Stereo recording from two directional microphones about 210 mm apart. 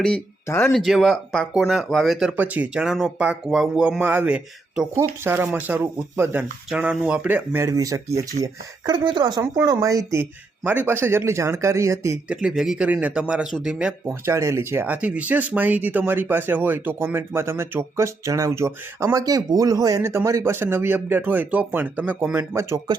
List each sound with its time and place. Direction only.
0.0 s speech: 10° left (ahead or behind)
0.7 s speech: centre (ahead or behind)